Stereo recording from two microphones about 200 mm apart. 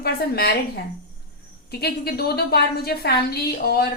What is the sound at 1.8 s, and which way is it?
A woman's voice, 50° left (ahead or behind).